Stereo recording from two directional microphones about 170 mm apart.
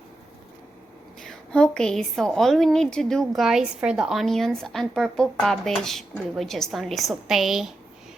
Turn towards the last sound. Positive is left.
turn(degrees=0)  # may be behind; listen again after turning